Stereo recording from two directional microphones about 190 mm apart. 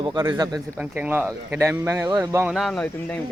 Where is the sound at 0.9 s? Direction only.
10° right (ahead or behind).